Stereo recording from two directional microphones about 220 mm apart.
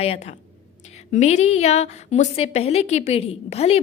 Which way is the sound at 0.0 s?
30° left (ahead or behind).